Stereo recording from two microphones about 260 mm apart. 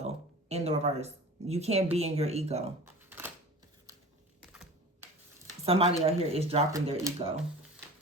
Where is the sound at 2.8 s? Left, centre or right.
Centre.